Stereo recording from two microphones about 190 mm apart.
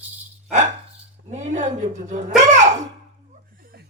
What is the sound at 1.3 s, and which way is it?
A man's voice, 40° right (ahead or behind).